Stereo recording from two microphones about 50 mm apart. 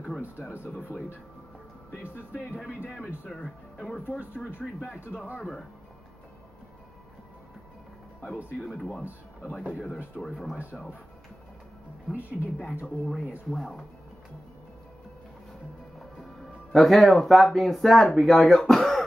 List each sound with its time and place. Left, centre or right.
0.4 s a woman's voice: left
3.4 s speech: centre
8.5 s speech: centre
10.3 s speech: centre
12.2 s a woman's voice: left
13.5 s speech: centre
16.7 s speech: centre